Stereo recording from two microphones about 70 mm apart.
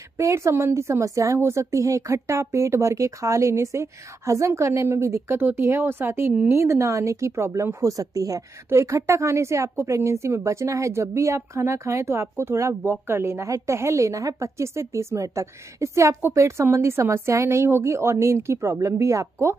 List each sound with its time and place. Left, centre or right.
0.2 s a woman's voice: right
8.6 s a woman's voice: right